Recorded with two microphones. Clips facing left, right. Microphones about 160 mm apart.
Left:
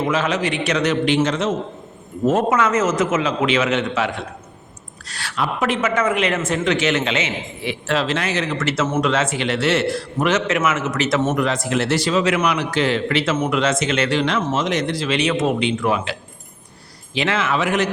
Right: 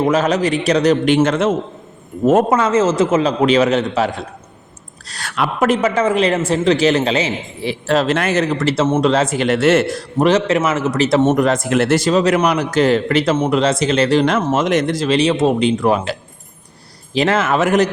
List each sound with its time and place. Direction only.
0.0 s a man's voice: 40° right (ahead or behind)
2.5 s a man's voice: 30° right (ahead or behind); by 10.0 s 50° right (ahead or behind)
10.2 s a man's voice: 35° right (ahead or behind)
11.4 s a man's voice: 50° right (ahead or behind)
13.3 s a man's voice: 30° right (ahead or behind)
17.2 s a man's voice: 40° right (ahead or behind)